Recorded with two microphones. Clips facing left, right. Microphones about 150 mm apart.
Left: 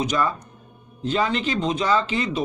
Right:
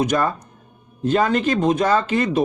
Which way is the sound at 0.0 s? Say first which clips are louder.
Right 3 dB; 50° right (ahead or behind).